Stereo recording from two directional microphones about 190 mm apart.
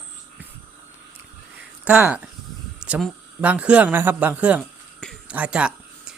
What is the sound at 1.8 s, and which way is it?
Speech, 5° right (ahead or behind).